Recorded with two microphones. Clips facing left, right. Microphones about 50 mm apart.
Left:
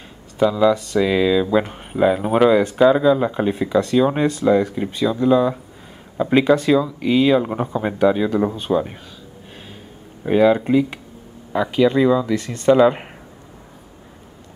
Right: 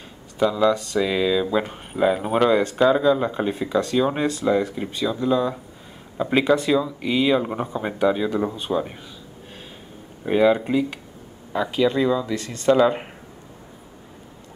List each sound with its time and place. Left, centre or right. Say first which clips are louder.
0.4 s speech: left 3 dB; centre
10.2 s speech: left 3 dB; centre